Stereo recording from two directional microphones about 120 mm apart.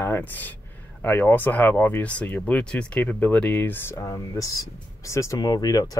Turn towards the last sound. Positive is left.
turn(degrees=30)  # may be behind; listen again after turning